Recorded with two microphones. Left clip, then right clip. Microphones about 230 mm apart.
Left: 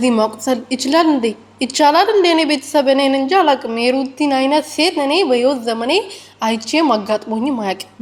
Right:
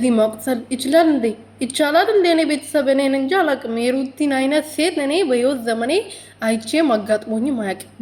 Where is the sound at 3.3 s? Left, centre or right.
Left.